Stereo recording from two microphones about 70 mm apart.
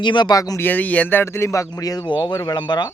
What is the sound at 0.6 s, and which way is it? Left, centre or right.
Speech, left.